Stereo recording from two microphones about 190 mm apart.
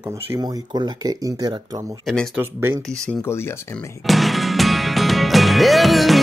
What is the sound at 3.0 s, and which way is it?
Speech, 10° left (ahead or behind).